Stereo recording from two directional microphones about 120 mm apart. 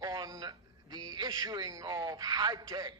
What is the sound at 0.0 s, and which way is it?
Music, 35° right (ahead or behind).